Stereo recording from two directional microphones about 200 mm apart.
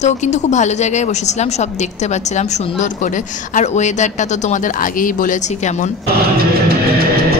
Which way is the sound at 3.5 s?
35° left (ahead or behind).